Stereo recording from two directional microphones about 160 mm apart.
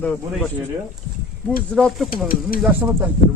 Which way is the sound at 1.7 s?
Centre (ahead or behind).